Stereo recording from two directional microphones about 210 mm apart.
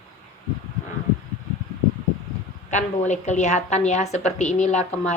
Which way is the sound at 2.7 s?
35° left (ahead or behind).